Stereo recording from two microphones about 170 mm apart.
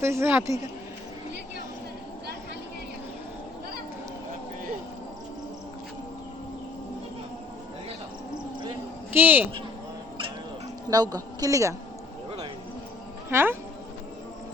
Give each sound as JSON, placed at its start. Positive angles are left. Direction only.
{"t": 0.0, "sound": "a man's voice", "side_deg": -15}
{"t": 9.1, "sound": "a man's voice", "side_deg": -10}
{"t": 10.8, "sound": "a woman's voice", "side_deg": -20}
{"t": 13.3, "sound": "a man's voice", "side_deg": -15}